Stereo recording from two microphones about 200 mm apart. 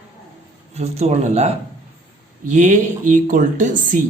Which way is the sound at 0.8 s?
30° right (ahead or behind).